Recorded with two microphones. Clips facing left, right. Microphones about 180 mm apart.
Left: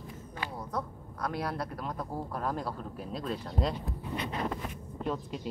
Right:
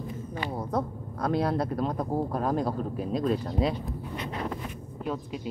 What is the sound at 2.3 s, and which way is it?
Speech, 20° right (ahead or behind).